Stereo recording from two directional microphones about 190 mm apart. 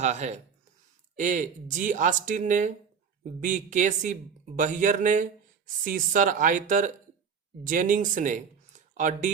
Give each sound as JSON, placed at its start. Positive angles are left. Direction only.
{"t": 0.0, "sound": "speech", "side_deg": -35}